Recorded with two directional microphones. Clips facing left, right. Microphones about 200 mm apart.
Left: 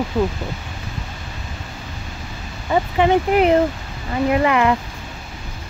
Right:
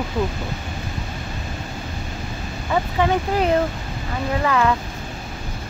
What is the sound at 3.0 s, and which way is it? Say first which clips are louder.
Speech: left 6 dB; 20° left (ahead or behind).